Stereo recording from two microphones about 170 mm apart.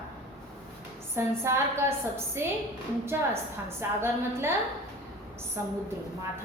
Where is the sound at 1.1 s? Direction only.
15° right (ahead or behind).